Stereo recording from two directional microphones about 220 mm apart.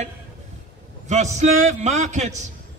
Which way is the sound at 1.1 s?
30° right (ahead or behind).